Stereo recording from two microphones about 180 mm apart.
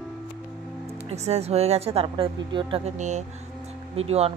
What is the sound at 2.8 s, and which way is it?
A woman's voice, 40° right (ahead or behind).